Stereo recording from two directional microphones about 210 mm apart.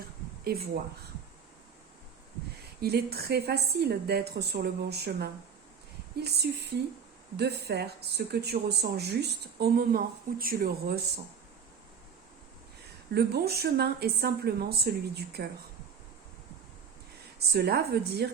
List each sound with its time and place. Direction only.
2.8 s speech: 50° right (ahead or behind)
13.1 s speech: 50° right (ahead or behind)
17.5 s speech: 50° right (ahead or behind)